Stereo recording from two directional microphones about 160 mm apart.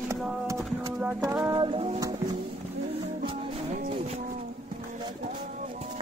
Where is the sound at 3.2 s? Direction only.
35° right (ahead or behind).